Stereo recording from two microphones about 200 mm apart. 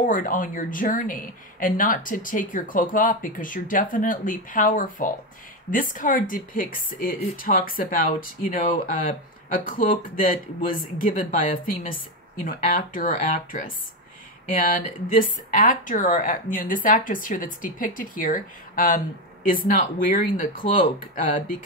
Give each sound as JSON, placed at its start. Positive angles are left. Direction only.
{"t": 0.0, "sound": "speech", "side_deg": 40}